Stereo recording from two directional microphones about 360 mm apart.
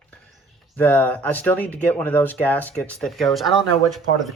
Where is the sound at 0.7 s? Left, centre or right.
Centre.